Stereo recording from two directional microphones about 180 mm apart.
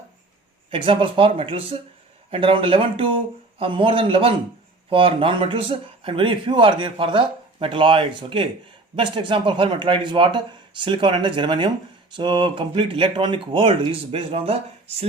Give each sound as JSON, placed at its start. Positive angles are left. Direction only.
{"t": 0.7, "sound": "speech", "side_deg": -30}